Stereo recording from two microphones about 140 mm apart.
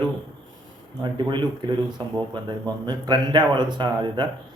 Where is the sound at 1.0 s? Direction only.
35° right (ahead or behind).